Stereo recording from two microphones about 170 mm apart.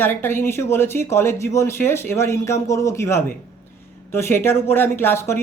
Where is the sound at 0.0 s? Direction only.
15° left (ahead or behind).